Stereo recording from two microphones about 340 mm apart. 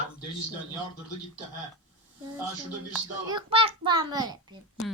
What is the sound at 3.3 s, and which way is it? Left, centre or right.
A child's voice, centre.